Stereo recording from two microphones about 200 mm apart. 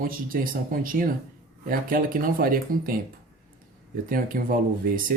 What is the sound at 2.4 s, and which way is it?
Speech, 45° right (ahead or behind).